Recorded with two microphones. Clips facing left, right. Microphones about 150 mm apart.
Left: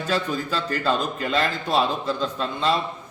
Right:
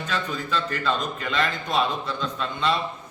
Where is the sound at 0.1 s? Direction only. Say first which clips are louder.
Left 3 dB; 35° left (ahead or behind).